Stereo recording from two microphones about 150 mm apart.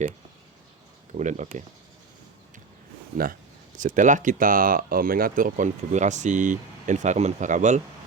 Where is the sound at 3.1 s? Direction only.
70° right (ahead or behind).